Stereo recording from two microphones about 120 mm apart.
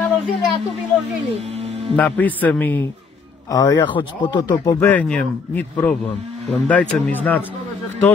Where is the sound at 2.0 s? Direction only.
15° left (ahead or behind).